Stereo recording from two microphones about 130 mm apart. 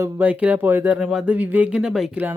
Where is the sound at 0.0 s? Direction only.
15° right (ahead or behind).